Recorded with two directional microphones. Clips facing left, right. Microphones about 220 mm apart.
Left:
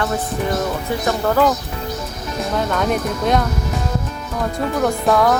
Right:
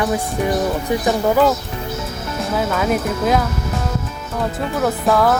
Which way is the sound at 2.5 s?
5° right (ahead or behind).